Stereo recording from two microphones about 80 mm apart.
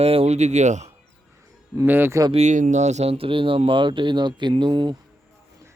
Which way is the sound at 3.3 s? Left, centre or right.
Right.